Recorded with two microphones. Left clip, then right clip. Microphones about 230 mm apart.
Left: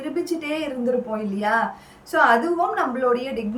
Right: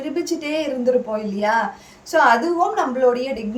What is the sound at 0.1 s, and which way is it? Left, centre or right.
Speech, centre.